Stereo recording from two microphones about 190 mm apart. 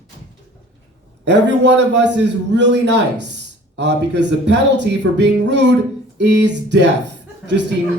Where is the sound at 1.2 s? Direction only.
65° right (ahead or behind).